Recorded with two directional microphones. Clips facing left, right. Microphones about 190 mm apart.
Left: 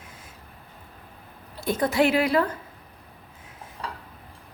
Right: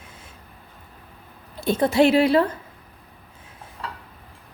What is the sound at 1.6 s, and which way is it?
Speech, 30° right (ahead or behind).